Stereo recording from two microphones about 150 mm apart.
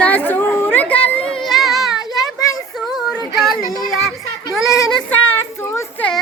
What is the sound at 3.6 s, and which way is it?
Child singing, 25° left (ahead or behind).